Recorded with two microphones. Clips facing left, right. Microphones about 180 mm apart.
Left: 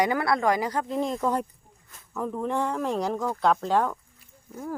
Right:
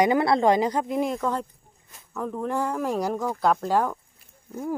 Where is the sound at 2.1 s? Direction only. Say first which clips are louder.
Even; centre (ahead or behind).